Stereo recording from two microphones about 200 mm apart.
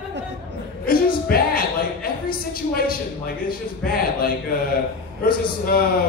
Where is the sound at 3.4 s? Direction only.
50° left (ahead or behind).